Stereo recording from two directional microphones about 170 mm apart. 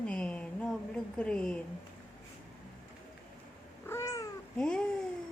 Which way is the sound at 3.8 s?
15° left (ahead or behind).